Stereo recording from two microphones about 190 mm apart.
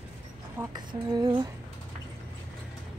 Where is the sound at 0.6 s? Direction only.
20° right (ahead or behind).